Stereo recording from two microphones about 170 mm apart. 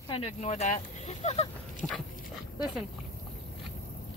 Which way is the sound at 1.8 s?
10° right (ahead or behind).